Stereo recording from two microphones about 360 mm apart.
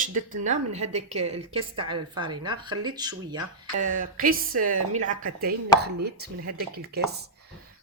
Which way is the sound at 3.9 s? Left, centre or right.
Right.